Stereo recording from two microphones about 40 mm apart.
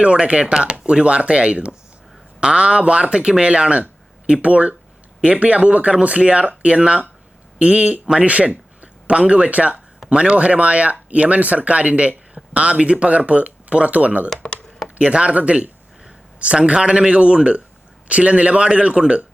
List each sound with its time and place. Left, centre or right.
0.0 s speech: right
8.4 s a sound: right
9.5 s speech: right
14.9 s speech: right